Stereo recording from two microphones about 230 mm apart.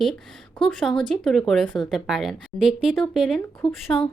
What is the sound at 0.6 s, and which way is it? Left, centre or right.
Speech, centre.